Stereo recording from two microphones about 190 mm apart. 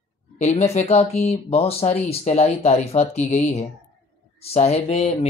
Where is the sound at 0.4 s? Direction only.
35° left (ahead or behind).